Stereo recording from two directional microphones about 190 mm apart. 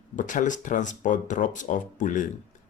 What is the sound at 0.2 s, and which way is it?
Speech, 45° left (ahead or behind).